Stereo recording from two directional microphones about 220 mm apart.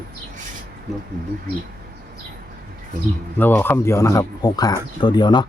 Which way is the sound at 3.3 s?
10° left (ahead or behind).